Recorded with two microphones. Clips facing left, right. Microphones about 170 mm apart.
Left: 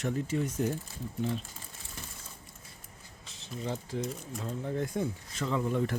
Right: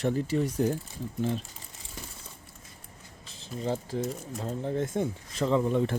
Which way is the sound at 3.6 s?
30° right (ahead or behind).